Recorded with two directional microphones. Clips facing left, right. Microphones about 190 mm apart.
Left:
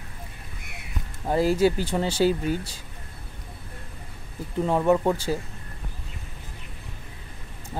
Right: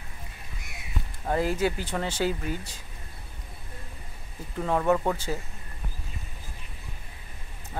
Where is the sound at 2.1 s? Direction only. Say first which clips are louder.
Left 7 dB; 35° left (ahead or behind).